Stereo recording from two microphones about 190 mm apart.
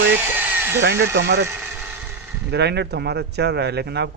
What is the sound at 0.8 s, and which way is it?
Speech, 65° right (ahead or behind).